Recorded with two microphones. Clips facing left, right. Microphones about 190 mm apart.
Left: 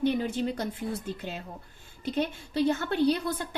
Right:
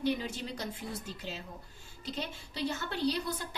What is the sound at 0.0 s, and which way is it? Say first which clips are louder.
A woman's voice: left 6 dB; 55° left (ahead or behind).